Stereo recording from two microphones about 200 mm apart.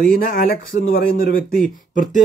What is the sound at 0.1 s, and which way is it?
A man's voice, 45° left (ahead or behind).